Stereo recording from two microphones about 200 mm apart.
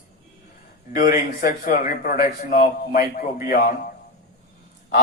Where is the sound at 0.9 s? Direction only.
45° left (ahead or behind).